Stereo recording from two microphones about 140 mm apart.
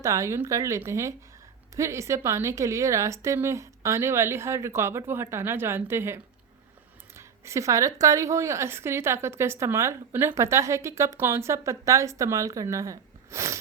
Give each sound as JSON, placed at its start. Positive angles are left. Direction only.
{"t": 0.0, "sound": "speech", "side_deg": -20}
{"t": 7.2, "sound": "speech", "side_deg": -20}